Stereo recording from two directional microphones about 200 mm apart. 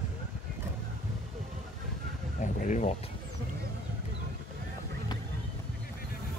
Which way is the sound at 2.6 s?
40° left (ahead or behind).